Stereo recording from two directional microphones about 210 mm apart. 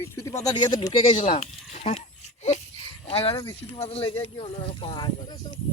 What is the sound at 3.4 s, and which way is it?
Speech, 25° left (ahead or behind).